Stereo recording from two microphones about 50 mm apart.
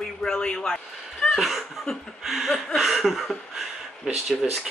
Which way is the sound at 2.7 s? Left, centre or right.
Centre.